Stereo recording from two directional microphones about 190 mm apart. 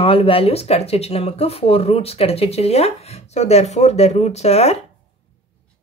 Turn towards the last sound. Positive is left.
turn(degrees=35)  # may be behind; listen again after turning